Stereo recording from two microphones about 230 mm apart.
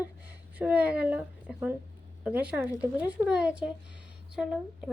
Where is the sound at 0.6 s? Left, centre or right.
Centre.